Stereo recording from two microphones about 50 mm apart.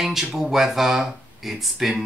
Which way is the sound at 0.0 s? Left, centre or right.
Centre.